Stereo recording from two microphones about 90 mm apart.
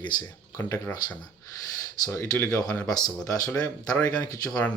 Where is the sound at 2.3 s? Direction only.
35° left (ahead or behind).